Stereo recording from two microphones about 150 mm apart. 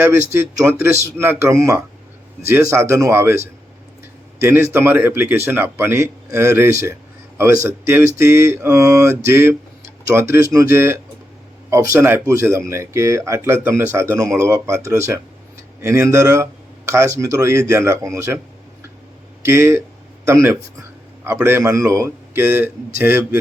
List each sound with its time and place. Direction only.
0.8 s a man's voice: 15° right (ahead or behind)
19.5 s a man's voice: 15° right (ahead or behind)